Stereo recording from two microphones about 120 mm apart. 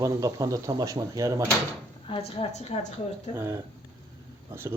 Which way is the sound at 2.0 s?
55° left (ahead or behind).